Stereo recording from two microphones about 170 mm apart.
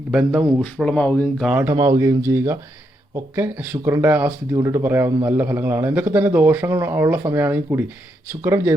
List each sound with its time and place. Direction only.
0.1 s speech: 5° right (ahead or behind)
0.6 s speech: 5° left (ahead or behind)
1.5 s speech: 10° right (ahead or behind)
1.7 s speech: 20° right (ahead or behind)